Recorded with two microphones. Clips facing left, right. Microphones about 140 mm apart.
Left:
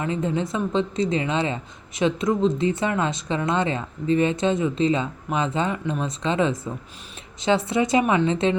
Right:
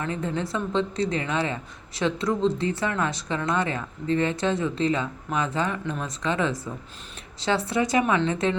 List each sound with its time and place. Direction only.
0.0 s a woman's voice: 20° left (ahead or behind)